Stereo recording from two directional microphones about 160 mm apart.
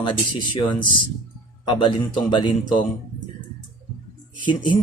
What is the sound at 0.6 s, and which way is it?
Speech, 30° left (ahead or behind).